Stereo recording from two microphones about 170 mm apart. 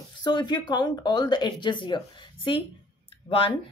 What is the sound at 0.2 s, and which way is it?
Speech, 25° left (ahead or behind).